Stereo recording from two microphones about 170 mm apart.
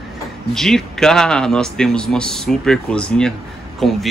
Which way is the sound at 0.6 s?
5° left (ahead or behind).